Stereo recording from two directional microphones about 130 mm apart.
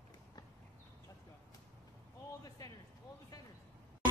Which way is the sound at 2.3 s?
30° left (ahead or behind).